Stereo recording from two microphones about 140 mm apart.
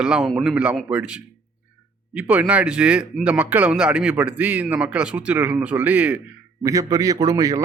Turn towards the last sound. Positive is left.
turn(degrees=-25)  # may be behind; listen again after turning